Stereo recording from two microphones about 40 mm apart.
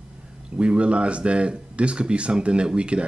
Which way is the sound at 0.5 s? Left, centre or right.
Right.